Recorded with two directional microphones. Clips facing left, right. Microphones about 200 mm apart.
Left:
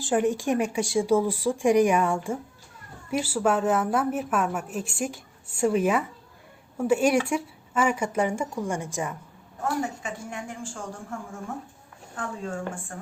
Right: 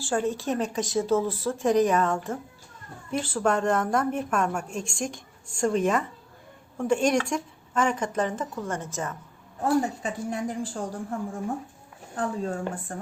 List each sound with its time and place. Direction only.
0.0 s a woman's voice: 15° left (ahead or behind)
9.6 s a woman's voice: 35° right (ahead or behind)